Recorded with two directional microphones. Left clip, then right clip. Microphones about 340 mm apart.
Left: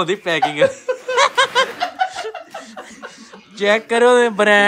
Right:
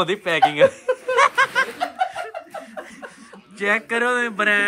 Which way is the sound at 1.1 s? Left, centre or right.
Centre.